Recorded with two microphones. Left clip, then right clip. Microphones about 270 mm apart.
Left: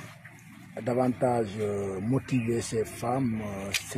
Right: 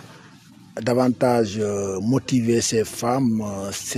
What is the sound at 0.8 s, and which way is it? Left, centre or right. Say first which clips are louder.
Speech: right 7 dB; right.